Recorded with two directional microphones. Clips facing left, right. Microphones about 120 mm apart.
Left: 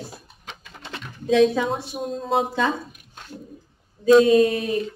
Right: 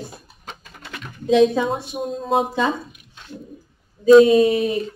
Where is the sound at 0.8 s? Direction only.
25° left (ahead or behind).